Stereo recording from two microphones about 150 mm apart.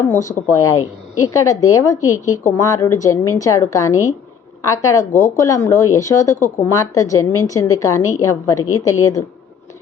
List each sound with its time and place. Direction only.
0.0 s speech: 20° left (ahead or behind)